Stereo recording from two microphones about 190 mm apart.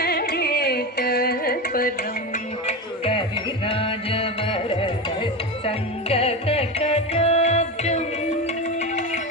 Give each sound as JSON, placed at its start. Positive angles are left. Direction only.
{"t": 0.0, "sound": "carnatic music", "side_deg": 55}
{"t": 2.3, "sound": "music", "side_deg": 30}